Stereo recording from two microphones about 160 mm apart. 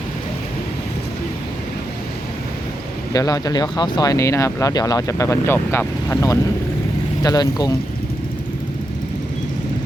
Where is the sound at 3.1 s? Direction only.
20° left (ahead or behind).